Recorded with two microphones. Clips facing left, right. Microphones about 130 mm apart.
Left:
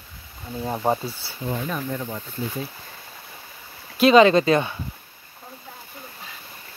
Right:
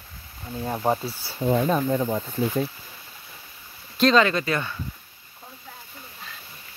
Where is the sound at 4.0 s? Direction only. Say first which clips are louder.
Left 5 dB; 10° left (ahead or behind).